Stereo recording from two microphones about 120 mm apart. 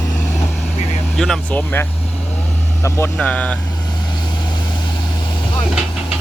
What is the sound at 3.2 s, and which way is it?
Speech, 10° left (ahead or behind).